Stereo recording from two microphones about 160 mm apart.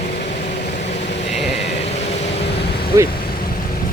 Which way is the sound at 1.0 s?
45° left (ahead or behind).